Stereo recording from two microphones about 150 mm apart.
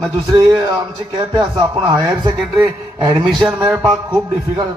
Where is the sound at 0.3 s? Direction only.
30° right (ahead or behind).